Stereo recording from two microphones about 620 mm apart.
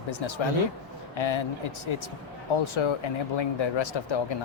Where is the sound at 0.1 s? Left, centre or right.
Left.